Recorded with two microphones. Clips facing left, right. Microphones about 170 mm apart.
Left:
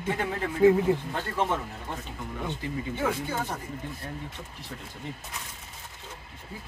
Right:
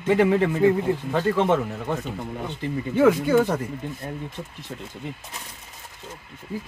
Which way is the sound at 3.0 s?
90° right.